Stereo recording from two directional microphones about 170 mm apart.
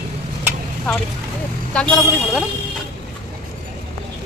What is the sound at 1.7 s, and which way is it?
Speech, 5° left (ahead or behind).